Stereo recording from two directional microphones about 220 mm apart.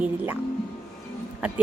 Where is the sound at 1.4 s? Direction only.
5° right (ahead or behind).